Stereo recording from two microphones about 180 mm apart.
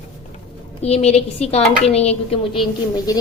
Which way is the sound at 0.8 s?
35° left (ahead or behind).